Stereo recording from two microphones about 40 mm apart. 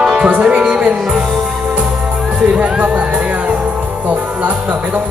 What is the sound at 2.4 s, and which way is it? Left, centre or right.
Music, right.